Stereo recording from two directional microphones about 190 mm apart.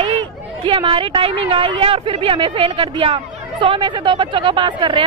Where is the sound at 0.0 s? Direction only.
25° right (ahead or behind).